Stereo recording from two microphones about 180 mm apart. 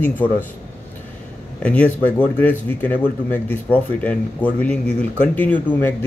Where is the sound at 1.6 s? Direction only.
10° left (ahead or behind).